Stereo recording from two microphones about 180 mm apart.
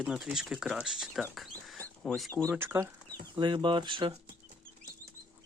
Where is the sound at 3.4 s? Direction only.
25° right (ahead or behind).